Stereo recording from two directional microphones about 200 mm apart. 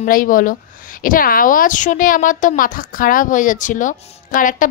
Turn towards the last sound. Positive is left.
turn(degrees=40)  # may be behind; listen again after turning